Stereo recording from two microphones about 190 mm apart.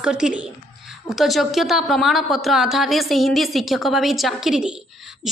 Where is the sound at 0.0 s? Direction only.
5° right (ahead or behind).